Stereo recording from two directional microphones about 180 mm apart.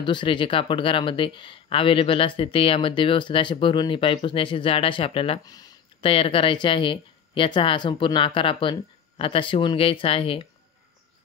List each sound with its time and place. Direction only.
0.0 s speech: 25° left (ahead or behind)